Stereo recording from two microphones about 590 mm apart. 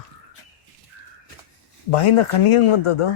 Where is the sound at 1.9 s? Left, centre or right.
Left.